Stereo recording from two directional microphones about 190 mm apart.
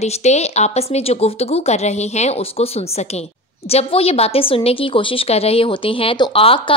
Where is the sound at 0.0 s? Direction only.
35° left (ahead or behind).